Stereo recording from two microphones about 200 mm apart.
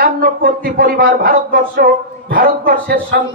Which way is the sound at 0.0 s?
45° right (ahead or behind).